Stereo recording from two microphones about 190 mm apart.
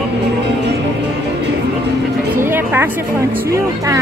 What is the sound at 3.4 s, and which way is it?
Speech, 15° right (ahead or behind).